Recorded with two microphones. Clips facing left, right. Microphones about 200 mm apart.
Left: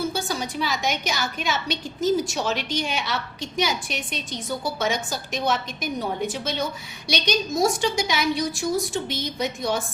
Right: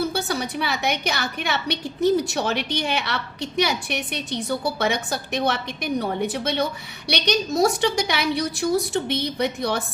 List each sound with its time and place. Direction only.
0.0 s a woman's voice: 65° right (ahead or behind)